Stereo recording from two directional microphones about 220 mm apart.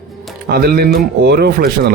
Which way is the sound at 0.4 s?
45° right (ahead or behind).